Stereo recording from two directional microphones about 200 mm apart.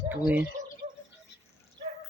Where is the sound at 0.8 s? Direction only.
45° right (ahead or behind).